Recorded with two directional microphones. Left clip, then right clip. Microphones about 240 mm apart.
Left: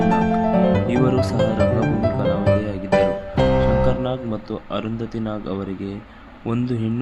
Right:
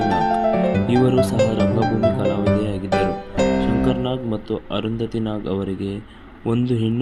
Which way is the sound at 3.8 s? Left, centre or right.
Centre.